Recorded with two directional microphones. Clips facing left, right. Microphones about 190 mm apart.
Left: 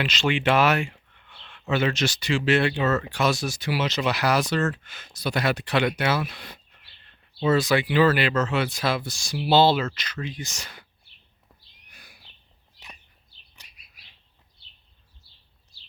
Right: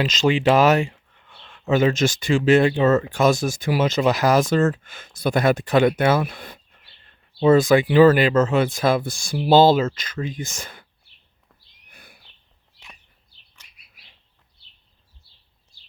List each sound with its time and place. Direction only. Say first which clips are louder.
0.0 s speech: right 5 dB; 40° right (ahead or behind)
1.4 s a sound: right 6 dB; 25° right (ahead or behind)
1.7 s speech: right 6 dB; 45° right (ahead or behind)
2.7 s speech: right 6 dB; 30° right (ahead or behind)
3.1 s speech: right 6 dB; 45° right (ahead or behind)
7.5 s speech: right 6 dB; 50° right (ahead or behind)
11.9 s a sound: right 4 dB; 55° right (ahead or behind)